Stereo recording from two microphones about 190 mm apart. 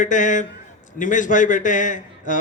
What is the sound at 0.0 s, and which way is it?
A man's voice, 40° left (ahead or behind).